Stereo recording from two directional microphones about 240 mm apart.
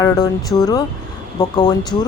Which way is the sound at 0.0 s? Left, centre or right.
Centre.